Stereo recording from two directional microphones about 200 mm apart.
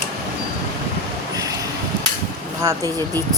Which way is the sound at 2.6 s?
15° right (ahead or behind).